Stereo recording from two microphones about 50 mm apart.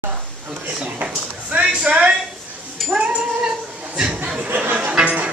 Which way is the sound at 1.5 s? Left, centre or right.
Right.